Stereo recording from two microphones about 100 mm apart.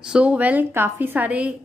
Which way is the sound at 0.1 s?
10° right (ahead or behind).